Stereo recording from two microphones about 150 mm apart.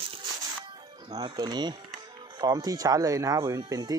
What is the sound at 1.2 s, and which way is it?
Speech, 25° right (ahead or behind).